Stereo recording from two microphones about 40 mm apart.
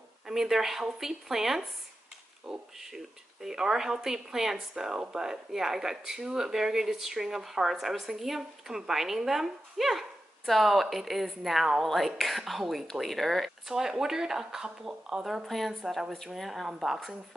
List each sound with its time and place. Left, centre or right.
0.3 s speech: centre
13.7 s speech: centre
15.4 s speech: centre